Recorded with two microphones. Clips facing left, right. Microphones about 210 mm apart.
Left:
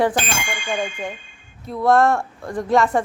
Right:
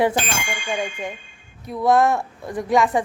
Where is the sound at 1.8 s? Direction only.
Centre (ahead or behind).